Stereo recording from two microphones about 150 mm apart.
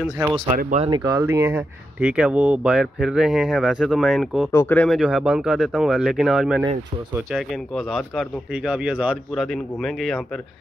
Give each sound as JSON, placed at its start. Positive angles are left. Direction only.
{"t": 0.7, "sound": "speech", "side_deg": -30}
{"t": 4.5, "sound": "speech", "side_deg": 15}
{"t": 4.8, "sound": "speech", "side_deg": -5}